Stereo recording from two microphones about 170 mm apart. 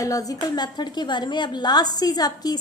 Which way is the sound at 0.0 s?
20° left (ahead or behind).